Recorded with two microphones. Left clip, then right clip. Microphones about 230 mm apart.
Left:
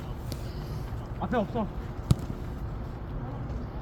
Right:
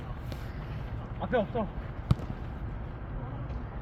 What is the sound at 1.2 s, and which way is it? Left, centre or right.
Speech, centre.